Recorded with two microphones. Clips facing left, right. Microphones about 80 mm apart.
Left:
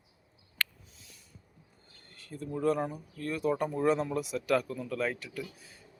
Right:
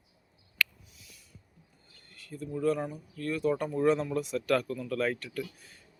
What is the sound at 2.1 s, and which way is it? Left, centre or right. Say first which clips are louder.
Speech: even; left.